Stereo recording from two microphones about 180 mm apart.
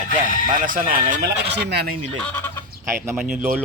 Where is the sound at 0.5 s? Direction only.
50° right (ahead or behind).